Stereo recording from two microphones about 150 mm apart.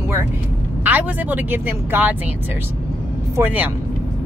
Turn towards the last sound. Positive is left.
turn(degrees=-10)  # may be behind; listen again after turning